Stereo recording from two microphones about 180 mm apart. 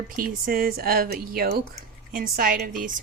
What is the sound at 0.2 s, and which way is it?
Speech, 55° right (ahead or behind).